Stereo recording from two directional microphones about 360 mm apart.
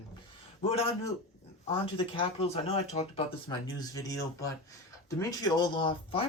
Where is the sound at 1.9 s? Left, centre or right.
Centre.